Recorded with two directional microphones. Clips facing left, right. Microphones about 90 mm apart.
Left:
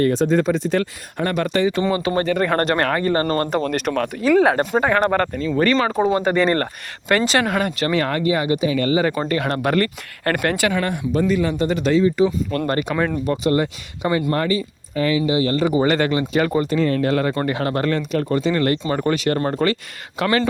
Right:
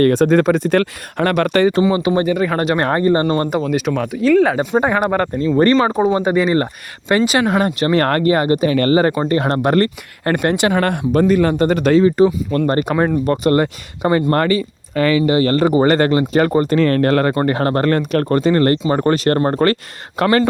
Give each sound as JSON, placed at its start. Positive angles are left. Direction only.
{"t": 0.0, "sound": "speech", "side_deg": -60}
{"t": 1.9, "sound": "speech", "side_deg": -15}
{"t": 2.9, "sound": "speech", "side_deg": -25}
{"t": 3.5, "sound": "speech", "side_deg": -5}
{"t": 4.7, "sound": "speech", "side_deg": -15}
{"t": 7.4, "sound": "speech", "side_deg": -30}
{"t": 7.9, "sound": "speech", "side_deg": -50}
{"t": 9.3, "sound": "speech", "side_deg": -30}
{"t": 10.8, "sound": "speech", "side_deg": -60}
{"t": 12.5, "sound": "speech", "side_deg": -30}
{"t": 13.2, "sound": "speech", "side_deg": -55}
{"t": 14.3, "sound": "speech", "side_deg": -65}
{"t": 16.7, "sound": "speech", "side_deg": -65}
{"t": 17.4, "sound": "speech", "side_deg": -45}